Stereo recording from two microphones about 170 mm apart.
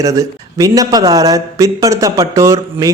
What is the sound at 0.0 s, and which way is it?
Speech, 20° right (ahead or behind).